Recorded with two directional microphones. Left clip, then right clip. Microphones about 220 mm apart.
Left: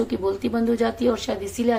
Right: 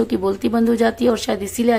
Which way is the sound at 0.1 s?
40° right (ahead or behind).